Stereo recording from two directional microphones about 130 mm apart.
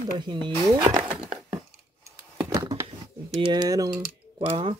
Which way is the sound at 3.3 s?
35° right (ahead or behind).